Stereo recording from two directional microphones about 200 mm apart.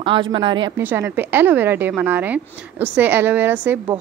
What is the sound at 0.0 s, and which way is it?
Speech, 25° right (ahead or behind).